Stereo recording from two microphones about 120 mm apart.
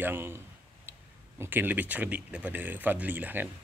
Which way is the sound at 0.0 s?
20° right (ahead or behind).